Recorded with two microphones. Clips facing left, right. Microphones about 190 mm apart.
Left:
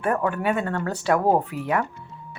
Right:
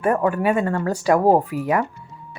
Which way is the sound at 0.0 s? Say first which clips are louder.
Right 4 dB; 10° right (ahead or behind).